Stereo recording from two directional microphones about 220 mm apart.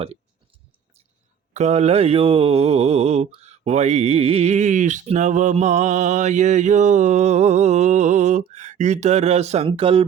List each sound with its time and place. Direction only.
1.5 s mantra: 30° right (ahead or behind)